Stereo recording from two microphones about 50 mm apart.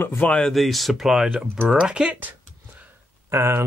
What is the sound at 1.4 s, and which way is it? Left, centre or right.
Speech, right.